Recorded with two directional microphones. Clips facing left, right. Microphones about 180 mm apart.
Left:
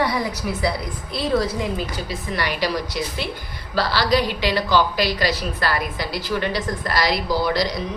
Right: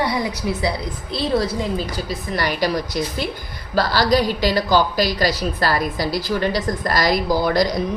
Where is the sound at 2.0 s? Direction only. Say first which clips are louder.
Right 2 dB; 40° right (ahead or behind).